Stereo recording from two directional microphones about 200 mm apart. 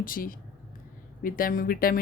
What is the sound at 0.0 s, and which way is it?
Speech, 45° left (ahead or behind).